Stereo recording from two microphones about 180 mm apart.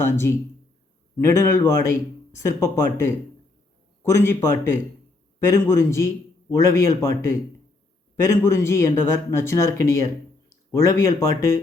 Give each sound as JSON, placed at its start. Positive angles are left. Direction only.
{"t": 0.0, "sound": "speech", "side_deg": 15}